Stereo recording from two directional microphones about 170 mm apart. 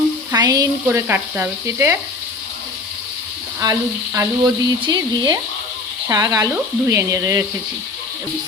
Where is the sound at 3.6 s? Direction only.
20° right (ahead or behind).